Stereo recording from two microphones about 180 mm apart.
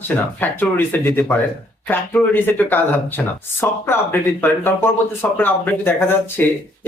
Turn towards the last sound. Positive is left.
turn(degrees=10)  # may be behind; listen again after turning